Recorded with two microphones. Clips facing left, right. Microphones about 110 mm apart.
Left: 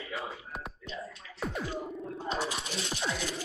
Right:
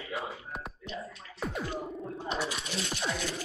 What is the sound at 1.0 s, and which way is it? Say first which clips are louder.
Music: left 2 dB; centre (ahead or behind).